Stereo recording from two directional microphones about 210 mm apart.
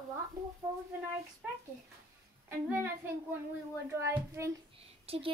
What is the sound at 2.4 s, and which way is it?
A woman's voice, 10° right (ahead or behind).